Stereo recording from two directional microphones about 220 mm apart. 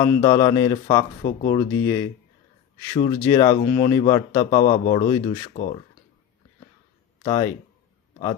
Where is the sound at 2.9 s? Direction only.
20° left (ahead or behind).